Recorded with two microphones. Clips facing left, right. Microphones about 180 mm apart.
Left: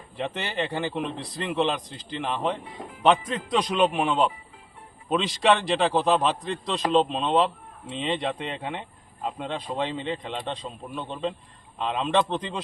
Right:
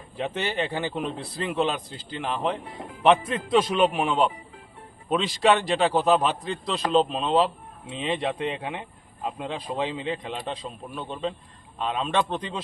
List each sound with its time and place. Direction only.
0.3 s a man's voice: 5° right (ahead or behind)